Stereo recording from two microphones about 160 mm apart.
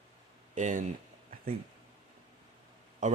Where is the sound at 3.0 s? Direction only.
50° right (ahead or behind).